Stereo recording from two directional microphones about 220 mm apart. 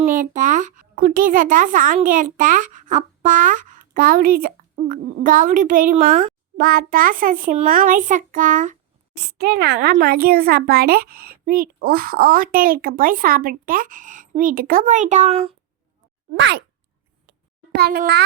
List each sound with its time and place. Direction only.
0.0 s speech: 35° right (ahead or behind)
9.1 s speech: 50° right (ahead or behind); by 15.5 s 30° right (ahead or behind)
16.3 s a child's voice: 50° right (ahead or behind)
17.7 s a child's voice: 45° right (ahead or behind)